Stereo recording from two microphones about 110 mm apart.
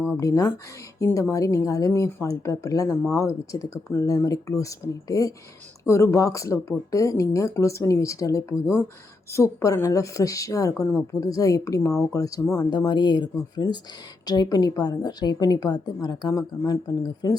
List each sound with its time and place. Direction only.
0.2 s a woman's voice: 30° left (ahead or behind)